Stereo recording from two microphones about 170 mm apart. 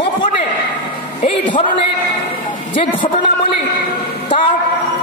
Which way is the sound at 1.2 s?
35° left (ahead or behind).